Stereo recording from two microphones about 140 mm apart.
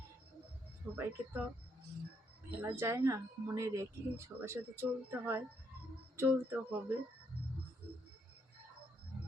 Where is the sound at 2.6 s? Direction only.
15° right (ahead or behind).